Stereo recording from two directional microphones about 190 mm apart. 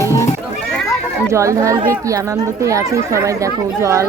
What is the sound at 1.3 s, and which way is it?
Speech, 15° right (ahead or behind).